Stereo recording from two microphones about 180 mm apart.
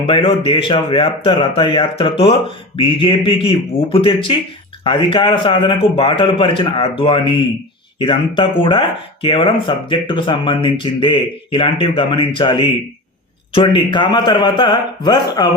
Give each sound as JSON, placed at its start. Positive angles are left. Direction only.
{"t": 0.0, "sound": "speech", "side_deg": 30}